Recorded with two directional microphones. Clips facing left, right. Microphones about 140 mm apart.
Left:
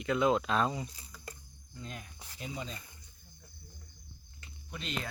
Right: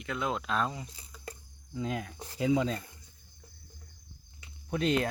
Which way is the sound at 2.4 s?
90° right.